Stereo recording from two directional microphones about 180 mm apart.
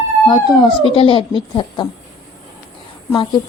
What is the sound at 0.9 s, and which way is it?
Speech, 30° left (ahead or behind).